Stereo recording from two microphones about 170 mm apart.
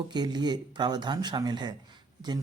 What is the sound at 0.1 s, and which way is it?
Speech, 25° right (ahead or behind).